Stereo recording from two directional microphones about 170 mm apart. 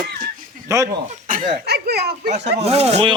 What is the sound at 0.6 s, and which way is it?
Speech, 20° right (ahead or behind).